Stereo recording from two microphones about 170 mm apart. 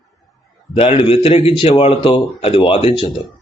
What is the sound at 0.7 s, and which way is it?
Speech, 35° left (ahead or behind).